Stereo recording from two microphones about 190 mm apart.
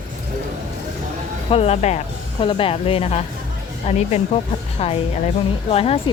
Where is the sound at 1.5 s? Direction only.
35° left (ahead or behind).